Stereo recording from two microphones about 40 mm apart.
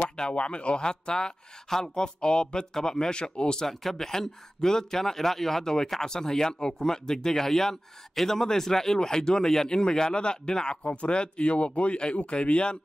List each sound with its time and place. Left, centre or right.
0.0 s speech: left
1.7 s speech: centre
2.2 s speech: left
3.6 s speech: centre; by 12.7 s left